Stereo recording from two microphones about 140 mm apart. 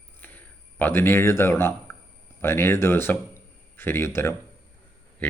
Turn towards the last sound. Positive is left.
turn(degrees=10)  # may be behind; listen again after turning